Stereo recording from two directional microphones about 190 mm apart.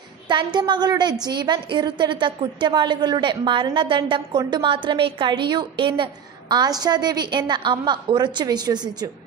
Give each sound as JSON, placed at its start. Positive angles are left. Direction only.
{"t": 0.3, "sound": "a woman's voice", "side_deg": -25}